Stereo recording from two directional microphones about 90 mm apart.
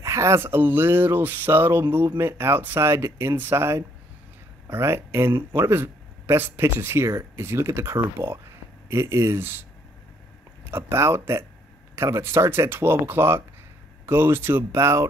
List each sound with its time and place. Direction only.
0.0 s speech: 35° right (ahead or behind)